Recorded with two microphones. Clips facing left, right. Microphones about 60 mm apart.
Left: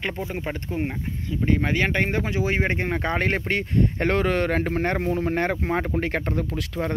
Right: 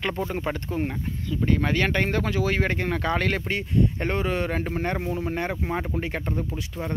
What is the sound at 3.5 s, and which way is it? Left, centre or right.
Speech, left.